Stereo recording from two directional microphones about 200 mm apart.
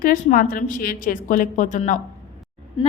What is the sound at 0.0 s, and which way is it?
A woman's voice, 45° left (ahead or behind).